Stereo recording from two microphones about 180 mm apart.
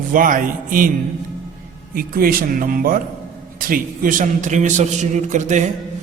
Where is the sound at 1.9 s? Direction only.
50° right (ahead or behind).